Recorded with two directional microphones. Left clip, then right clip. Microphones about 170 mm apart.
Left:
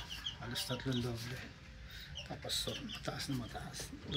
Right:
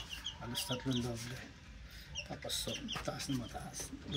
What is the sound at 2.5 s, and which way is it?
Speech, 10° right (ahead or behind).